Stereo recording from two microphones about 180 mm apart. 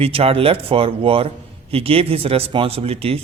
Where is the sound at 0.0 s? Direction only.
35° right (ahead or behind).